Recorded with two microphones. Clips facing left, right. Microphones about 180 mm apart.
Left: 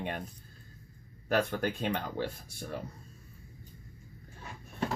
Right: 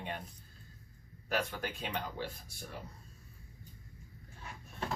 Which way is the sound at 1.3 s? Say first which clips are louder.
Left 7 dB; 55° left (ahead or behind).